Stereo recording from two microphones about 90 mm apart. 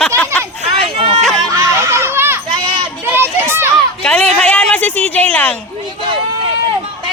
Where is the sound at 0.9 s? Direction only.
75° right (ahead or behind).